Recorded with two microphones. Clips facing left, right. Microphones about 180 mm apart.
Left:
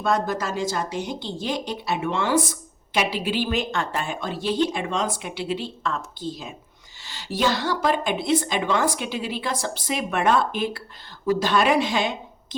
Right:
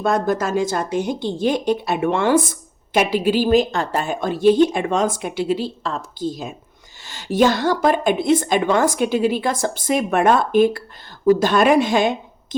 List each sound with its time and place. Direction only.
0.0 s speech: 50° right (ahead or behind)